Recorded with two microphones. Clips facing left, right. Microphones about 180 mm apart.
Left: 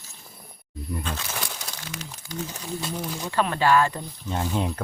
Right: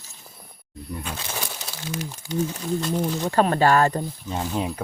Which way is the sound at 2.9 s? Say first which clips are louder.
Right 5 dB; 45° right (ahead or behind).